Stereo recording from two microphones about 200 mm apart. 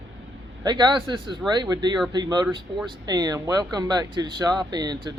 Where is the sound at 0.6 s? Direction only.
20° right (ahead or behind).